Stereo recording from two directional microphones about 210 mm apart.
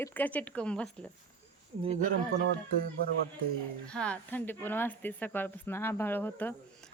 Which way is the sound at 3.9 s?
5° left (ahead or behind).